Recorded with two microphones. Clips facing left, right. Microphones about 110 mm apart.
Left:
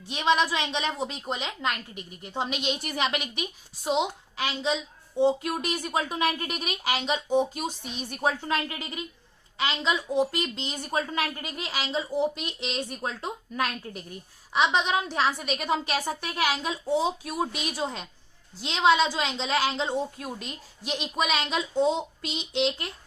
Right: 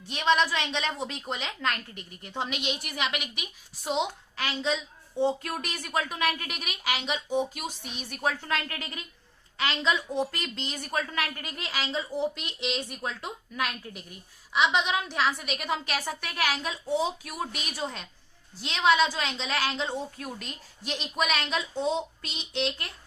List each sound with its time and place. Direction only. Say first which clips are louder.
0.1 s a woman's voice: left 1 dB; 20° left (ahead or behind); by 3.5 s 35° left (ahead or behind)
3.8 s a woman's voice: left 3 dB; 15° left (ahead or behind)
12.5 s a woman's voice: even; 35° left (ahead or behind); by 22.9 s 20° left (ahead or behind)